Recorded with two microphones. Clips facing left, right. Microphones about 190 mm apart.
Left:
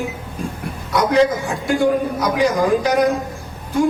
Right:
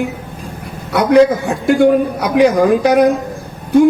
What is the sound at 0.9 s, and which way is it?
A woman's voice, 65° right (ahead or behind).